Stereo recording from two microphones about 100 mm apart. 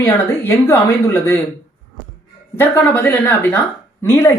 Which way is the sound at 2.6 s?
20° left (ahead or behind).